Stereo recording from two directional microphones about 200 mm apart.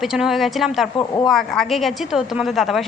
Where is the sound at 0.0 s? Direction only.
Centre (ahead or behind).